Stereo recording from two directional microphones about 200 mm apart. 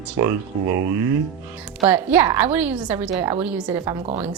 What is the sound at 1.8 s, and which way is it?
A woman's voice, 10° right (ahead or behind).